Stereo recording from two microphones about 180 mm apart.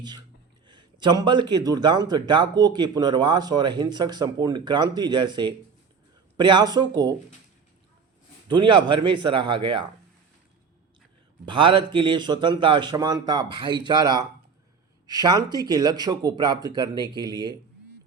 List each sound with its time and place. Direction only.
0.0 s a man's voice: 25° right (ahead or behind)
8.4 s a man's voice: 25° right (ahead or behind)
11.4 s a man's voice: 25° right (ahead or behind)